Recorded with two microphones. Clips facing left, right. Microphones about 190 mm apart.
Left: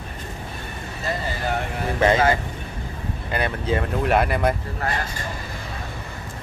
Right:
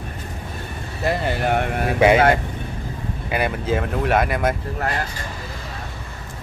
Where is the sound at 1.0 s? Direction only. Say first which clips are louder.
Right 6 dB; 65° right (ahead or behind).